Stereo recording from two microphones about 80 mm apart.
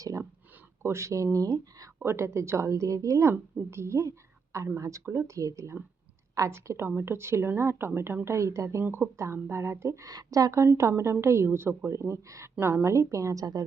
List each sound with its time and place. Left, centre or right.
0.0 s a sound: right
0.8 s a woman's voice: right
2.0 s a woman's voice: right
10.1 s a woman's voice: right